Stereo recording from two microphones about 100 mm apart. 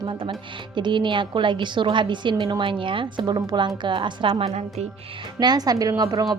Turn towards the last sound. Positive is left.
turn(degrees=-40)  # may be behind; listen again after turning